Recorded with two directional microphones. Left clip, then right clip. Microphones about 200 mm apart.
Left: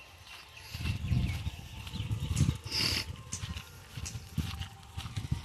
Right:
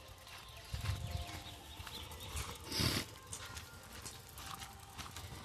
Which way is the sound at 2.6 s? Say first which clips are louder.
Left 6 dB; 15° right (ahead or behind).